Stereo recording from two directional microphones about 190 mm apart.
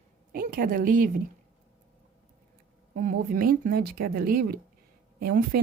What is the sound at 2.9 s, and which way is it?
Speech, 45° right (ahead or behind).